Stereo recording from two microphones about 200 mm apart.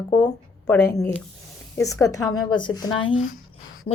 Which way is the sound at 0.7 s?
15° left (ahead or behind).